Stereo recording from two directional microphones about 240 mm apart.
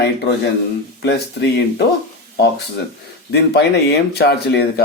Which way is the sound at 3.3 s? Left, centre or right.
Left.